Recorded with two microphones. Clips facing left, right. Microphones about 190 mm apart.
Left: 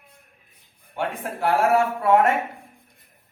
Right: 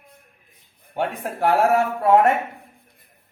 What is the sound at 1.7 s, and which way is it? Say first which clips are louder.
Speech: right 1 dB; 35° right (ahead or behind).